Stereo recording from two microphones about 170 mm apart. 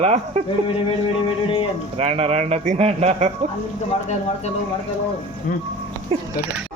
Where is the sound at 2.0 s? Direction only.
40° right (ahead or behind).